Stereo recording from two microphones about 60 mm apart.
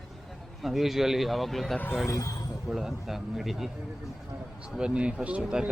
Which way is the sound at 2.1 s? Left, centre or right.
Left.